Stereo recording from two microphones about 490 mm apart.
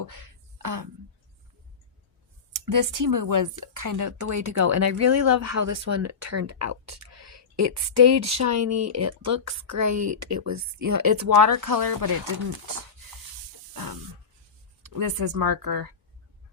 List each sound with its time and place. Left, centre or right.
0.0 s a sound: right
2.5 s speech: right
13.7 s spray: right
14.8 s speech: right